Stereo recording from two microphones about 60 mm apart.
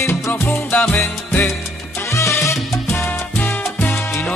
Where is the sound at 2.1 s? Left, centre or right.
Left.